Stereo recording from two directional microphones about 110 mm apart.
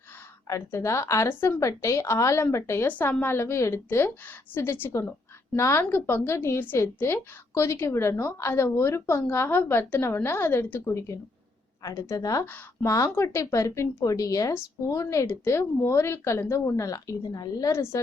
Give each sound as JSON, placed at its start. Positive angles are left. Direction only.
{"t": 0.4, "sound": "a woman's voice", "side_deg": 30}
{"t": 17.7, "sound": "a woman's voice", "side_deg": 25}